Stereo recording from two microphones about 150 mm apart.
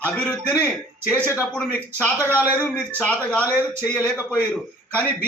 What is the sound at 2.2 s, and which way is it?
Speech, 10° right (ahead or behind).